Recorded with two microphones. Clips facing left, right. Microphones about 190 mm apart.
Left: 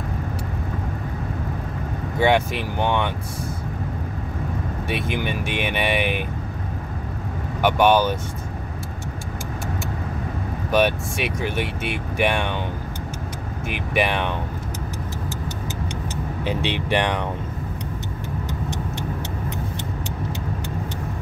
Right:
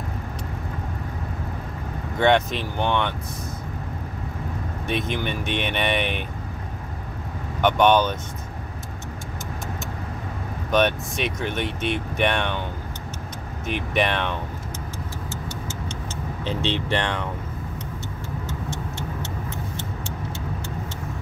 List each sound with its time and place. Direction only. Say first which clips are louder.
2.1 s speech: even; 10° left (ahead or behind)
4.8 s speech: even; 10° left (ahead or behind)
7.6 s speech: left 1 dB; 10° left (ahead or behind)
10.7 s speech: left 1 dB; 10° left (ahead or behind)
13.7 s speech: even; 10° left (ahead or behind)
16.4 s speech: left 1 dB; 15° left (ahead or behind)
18.5 s vehicle: left 3 dB; 15° left (ahead or behind)